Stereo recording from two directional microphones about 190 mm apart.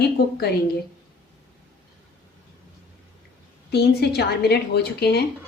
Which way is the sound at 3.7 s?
60° left (ahead or behind).